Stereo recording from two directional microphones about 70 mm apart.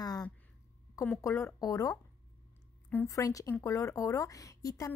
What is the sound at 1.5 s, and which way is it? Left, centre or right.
Speech, left.